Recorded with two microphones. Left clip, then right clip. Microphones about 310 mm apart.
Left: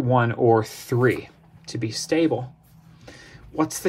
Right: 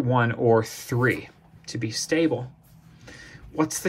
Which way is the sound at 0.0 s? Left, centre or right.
Centre.